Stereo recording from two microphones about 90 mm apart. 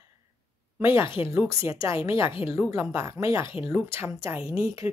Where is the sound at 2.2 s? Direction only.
75° left (ahead or behind).